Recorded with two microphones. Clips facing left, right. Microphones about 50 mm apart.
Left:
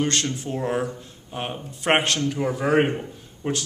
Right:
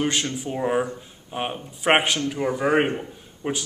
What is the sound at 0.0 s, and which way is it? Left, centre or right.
A man's voice, centre.